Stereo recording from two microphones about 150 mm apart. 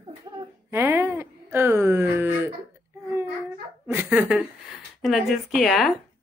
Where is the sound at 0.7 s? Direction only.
15° right (ahead or behind).